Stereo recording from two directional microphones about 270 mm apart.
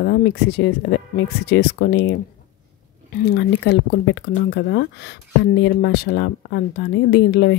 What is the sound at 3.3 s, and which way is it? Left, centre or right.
Speech, left.